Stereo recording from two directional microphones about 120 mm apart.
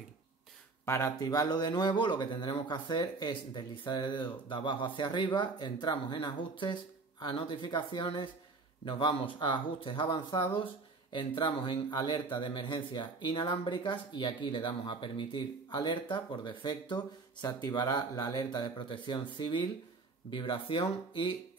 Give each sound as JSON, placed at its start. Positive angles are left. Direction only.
{"t": 0.8, "sound": "speech", "side_deg": 25}